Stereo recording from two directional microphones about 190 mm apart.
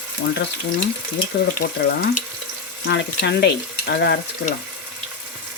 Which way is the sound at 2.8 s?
65° left (ahead or behind).